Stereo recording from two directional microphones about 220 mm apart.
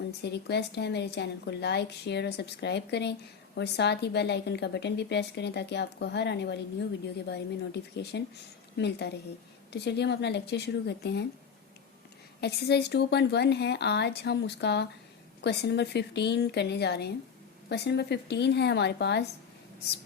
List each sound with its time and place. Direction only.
0.2 s a woman's voice: 50° left (ahead or behind)
12.4 s a woman's voice: 50° left (ahead or behind)